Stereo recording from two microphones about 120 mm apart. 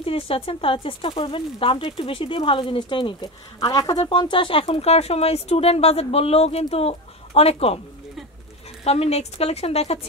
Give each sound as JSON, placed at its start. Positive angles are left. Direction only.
{"t": 0.0, "sound": "speech", "side_deg": 50}
{"t": 8.8, "sound": "speech", "side_deg": 60}